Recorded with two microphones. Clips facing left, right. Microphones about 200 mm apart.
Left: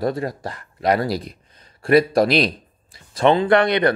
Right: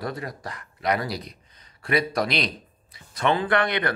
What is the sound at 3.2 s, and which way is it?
Speech, 25° left (ahead or behind).